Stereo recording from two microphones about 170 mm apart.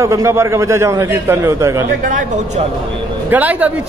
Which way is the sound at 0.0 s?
15° right (ahead or behind).